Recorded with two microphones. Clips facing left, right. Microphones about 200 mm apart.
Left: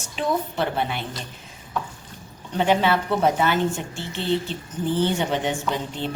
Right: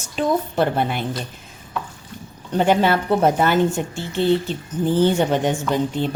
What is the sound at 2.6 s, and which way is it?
A woman's voice, 45° right (ahead or behind).